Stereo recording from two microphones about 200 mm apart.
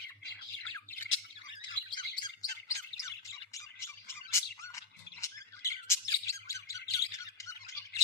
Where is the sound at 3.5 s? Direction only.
15° left (ahead or behind).